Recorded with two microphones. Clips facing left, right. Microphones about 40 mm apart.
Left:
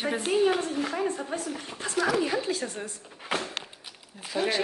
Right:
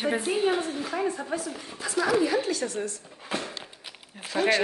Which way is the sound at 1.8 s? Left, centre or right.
Left.